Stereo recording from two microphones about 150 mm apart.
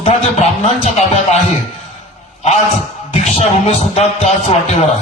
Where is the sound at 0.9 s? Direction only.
50° left (ahead or behind).